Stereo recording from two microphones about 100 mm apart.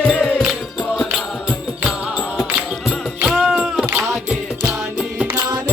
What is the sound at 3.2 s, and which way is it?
Music, 5° right (ahead or behind).